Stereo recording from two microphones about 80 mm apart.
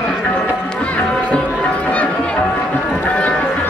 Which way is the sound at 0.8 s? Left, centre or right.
Centre.